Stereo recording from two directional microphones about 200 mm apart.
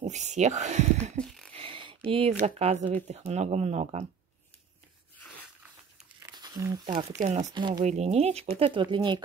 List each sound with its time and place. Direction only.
0.0 s speech: 35° right (ahead or behind)
1.5 s zipper: 25° right (ahead or behind)
3.1 s speech: 35° right (ahead or behind)
5.2 s a sound: 5° right (ahead or behind)
6.1 s a sound: 15° right (ahead or behind)
7.2 s speech: 35° right (ahead or behind)
7.5 s speech: 20° right (ahead or behind)
7.8 s speech: 35° right (ahead or behind)